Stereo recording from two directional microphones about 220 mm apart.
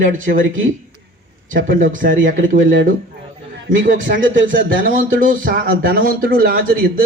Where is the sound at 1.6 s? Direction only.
40° right (ahead or behind).